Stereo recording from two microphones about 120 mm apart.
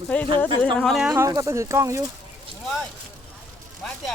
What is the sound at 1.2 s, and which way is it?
Speech, 25° right (ahead or behind).